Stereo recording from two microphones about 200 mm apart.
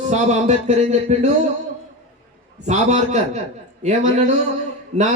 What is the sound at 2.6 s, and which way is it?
A man's voice, 35° right (ahead or behind).